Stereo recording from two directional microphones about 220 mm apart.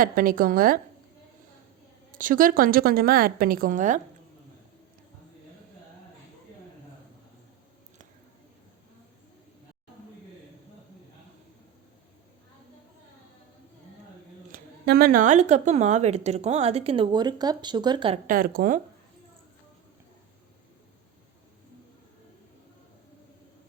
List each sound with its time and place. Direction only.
0.0 s a woman's voice: 40° right (ahead or behind)
2.1 s a woman's voice: 40° right (ahead or behind)
14.5 s a woman's voice: 45° right (ahead or behind); by 18.2 s 20° right (ahead or behind)
18.3 s a woman's voice: 40° right (ahead or behind)